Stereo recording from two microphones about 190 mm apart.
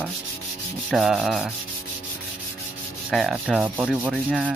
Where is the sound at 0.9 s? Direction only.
Centre (ahead or behind).